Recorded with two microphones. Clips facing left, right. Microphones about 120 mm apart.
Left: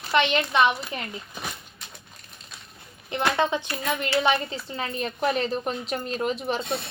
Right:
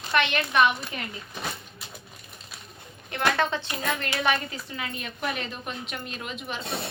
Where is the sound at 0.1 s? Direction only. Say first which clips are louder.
Left 3 dB; 20° left (ahead or behind).